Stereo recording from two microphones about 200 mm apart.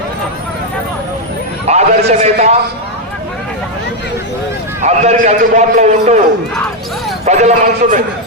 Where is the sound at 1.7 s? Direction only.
35° right (ahead or behind).